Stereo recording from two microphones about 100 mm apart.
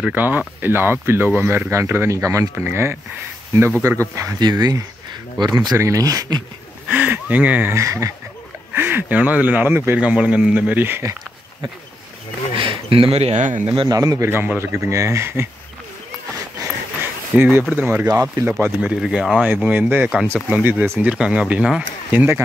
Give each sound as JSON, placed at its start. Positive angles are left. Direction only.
{"t": 0.1, "sound": "speech", "side_deg": -15}
{"t": 6.9, "sound": "a sound", "side_deg": -15}
{"t": 7.7, "sound": "speech", "side_deg": -30}
{"t": 8.7, "sound": "speech", "side_deg": -20}
{"t": 10.0, "sound": "speech", "side_deg": -10}
{"t": 12.5, "sound": "speech", "side_deg": -60}
{"t": 13.8, "sound": "speech", "side_deg": -35}
{"t": 14.3, "sound": "speech", "side_deg": -20}
{"t": 17.3, "sound": "speech", "side_deg": -10}
{"t": 18.0, "sound": "speech", "side_deg": -30}
{"t": 18.8, "sound": "speech", "side_deg": -10}